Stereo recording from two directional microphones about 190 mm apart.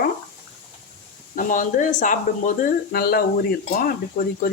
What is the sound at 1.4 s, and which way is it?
Speech, 45° left (ahead or behind).